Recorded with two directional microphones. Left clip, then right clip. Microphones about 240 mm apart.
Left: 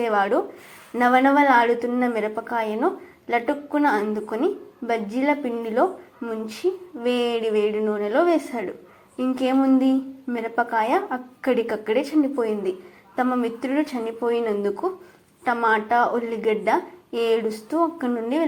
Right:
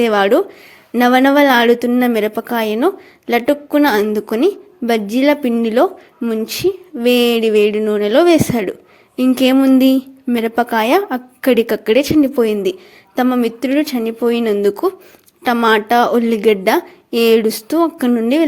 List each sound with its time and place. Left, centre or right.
0.0 s a woman's voice: right